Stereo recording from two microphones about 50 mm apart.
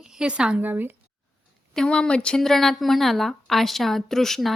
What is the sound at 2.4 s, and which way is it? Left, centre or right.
A woman's voice, centre.